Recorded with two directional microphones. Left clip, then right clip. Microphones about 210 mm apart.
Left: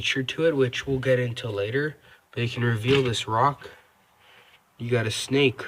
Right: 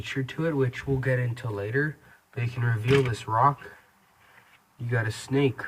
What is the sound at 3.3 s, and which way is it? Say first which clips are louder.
Speech: right 1 dB; 45° left (ahead or behind).